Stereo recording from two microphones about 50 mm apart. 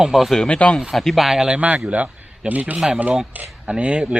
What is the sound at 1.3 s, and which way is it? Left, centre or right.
Speech, centre.